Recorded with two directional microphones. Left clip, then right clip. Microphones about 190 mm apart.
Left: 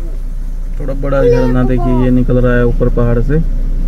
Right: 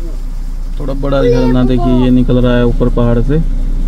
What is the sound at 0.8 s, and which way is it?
Speech, 20° right (ahead or behind).